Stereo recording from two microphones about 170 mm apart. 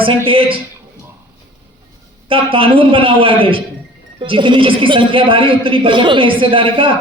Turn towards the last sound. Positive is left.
turn(degrees=-30)  # may be behind; listen again after turning